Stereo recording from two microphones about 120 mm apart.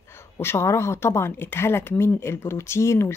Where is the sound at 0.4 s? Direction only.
20° left (ahead or behind).